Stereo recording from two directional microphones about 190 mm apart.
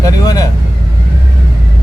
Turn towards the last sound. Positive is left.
turn(degrees=20)  # may be behind; listen again after turning